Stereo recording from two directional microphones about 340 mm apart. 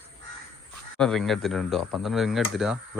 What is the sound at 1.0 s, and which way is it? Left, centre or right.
Speech, centre.